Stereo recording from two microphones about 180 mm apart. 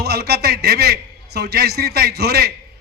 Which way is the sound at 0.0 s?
65° right (ahead or behind).